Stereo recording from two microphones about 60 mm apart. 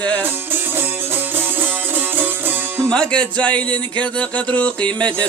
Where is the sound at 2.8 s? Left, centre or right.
Centre.